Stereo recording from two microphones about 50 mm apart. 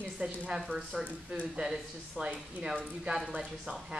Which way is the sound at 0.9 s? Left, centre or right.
Centre.